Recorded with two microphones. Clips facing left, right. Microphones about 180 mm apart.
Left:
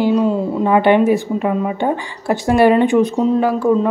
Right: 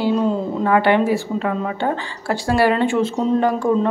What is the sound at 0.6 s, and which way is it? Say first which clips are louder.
Speech: left 4 dB; 20° left (ahead or behind).